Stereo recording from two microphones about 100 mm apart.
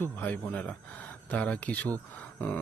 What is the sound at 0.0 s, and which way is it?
Speech, 15° left (ahead or behind).